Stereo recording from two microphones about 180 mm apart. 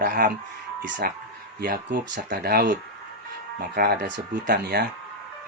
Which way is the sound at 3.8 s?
65° right (ahead or behind).